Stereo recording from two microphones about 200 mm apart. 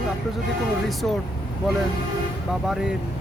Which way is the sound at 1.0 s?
5° left (ahead or behind).